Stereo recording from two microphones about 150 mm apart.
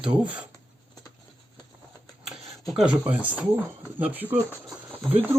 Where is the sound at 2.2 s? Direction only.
Centre (ahead or behind).